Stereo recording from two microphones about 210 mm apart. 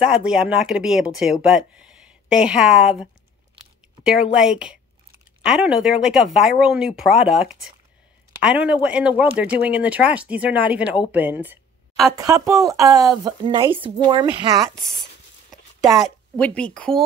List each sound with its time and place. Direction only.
0.0 s a woman's voice: 5° right (ahead or behind); by 14.5 s 20° right (ahead or behind)
16.3 s speech: 5° left (ahead or behind)